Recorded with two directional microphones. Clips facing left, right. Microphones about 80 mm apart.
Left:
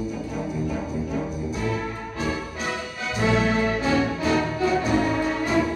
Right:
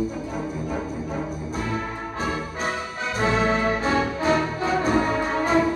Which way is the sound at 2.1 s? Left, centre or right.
Right.